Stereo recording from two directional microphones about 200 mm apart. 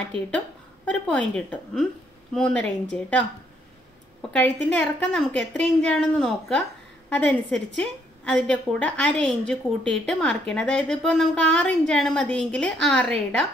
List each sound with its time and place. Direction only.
0.8 s a woman's voice: 5° left (ahead or behind)
4.3 s a woman's voice: 5° left (ahead or behind)